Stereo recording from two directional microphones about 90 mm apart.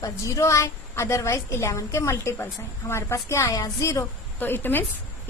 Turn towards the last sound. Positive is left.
turn(degrees=25)  # may be behind; listen again after turning